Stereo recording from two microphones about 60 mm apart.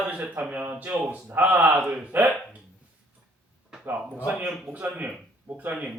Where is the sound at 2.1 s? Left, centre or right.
Right.